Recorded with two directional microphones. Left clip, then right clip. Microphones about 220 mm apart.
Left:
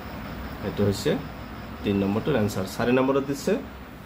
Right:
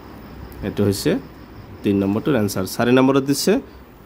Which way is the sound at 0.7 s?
45° right (ahead or behind).